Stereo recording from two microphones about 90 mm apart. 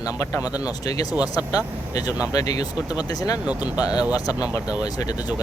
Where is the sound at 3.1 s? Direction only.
45° left (ahead or behind).